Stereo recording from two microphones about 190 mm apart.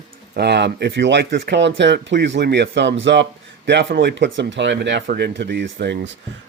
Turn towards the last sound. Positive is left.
turn(degrees=-65)  # may be behind; listen again after turning